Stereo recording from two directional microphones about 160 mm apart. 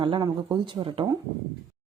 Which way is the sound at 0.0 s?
30° right (ahead or behind).